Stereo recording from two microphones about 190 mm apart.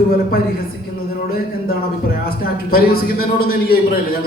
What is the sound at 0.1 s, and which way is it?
Speech, 50° left (ahead or behind).